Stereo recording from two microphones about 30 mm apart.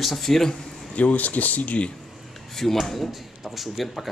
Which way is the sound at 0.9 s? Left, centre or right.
Left.